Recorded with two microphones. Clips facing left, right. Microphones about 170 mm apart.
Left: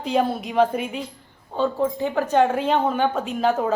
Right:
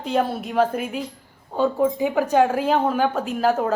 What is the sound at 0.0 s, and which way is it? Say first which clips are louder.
A woman's voice: left 1 dB; centre (ahead or behind).